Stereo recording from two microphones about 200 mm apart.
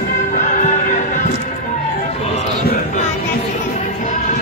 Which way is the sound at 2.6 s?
35° left (ahead or behind).